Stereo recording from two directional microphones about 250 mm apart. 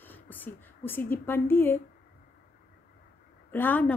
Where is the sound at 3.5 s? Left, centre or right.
Centre.